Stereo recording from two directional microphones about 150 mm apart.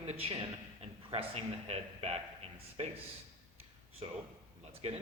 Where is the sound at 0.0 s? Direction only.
45° right (ahead or behind).